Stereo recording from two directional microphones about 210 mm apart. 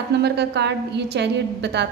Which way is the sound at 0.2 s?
55° right (ahead or behind).